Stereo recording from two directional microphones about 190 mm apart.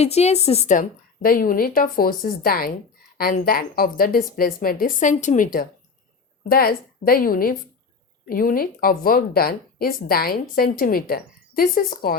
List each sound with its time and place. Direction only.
0.0 s a woman's voice: 35° left (ahead or behind)